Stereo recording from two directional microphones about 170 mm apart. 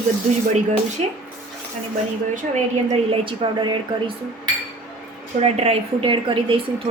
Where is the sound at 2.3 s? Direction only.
45° right (ahead or behind); by 4.1 s 25° right (ahead or behind).